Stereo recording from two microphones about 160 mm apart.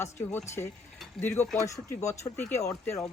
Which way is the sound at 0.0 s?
15° left (ahead or behind).